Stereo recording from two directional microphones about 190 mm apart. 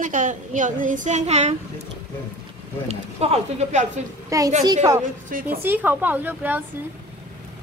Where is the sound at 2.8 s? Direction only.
35° right (ahead or behind).